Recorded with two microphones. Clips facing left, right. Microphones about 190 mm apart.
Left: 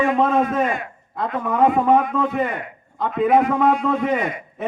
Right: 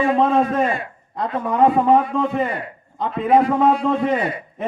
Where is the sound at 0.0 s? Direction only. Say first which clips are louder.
Right 1 dB; 30° right (ahead or behind).